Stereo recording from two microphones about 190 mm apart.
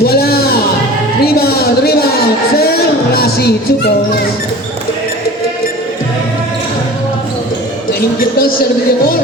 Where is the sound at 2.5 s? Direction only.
55° left (ahead or behind).